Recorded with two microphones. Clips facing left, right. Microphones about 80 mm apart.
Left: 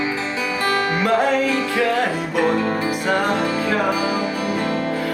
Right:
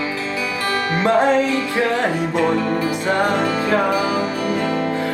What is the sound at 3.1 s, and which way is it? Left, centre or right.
Music, right.